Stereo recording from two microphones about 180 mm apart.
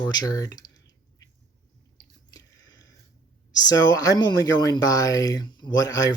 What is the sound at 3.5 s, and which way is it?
Speech, 20° left (ahead or behind).